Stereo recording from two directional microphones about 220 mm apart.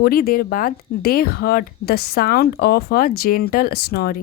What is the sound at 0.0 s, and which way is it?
A woman's voice, 40° left (ahead or behind).